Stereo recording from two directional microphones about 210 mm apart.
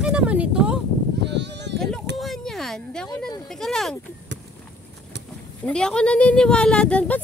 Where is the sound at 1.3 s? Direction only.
55° right (ahead or behind).